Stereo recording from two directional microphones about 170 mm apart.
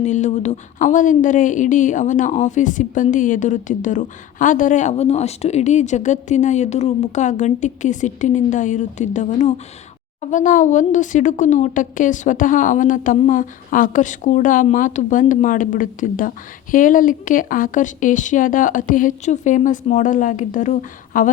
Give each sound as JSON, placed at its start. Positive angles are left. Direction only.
{"t": 0.0, "sound": "a woman's voice", "side_deg": 45}